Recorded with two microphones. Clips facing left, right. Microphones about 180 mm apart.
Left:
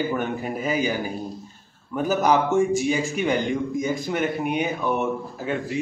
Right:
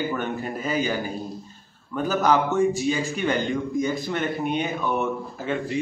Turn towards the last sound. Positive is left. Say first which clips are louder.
# left 1 dB
turn(degrees=10)  # may be behind; listen again after turning